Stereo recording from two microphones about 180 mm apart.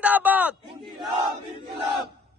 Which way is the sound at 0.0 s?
10° right (ahead or behind).